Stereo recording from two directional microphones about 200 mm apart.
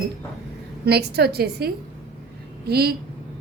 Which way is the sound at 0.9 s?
55° right (ahead or behind).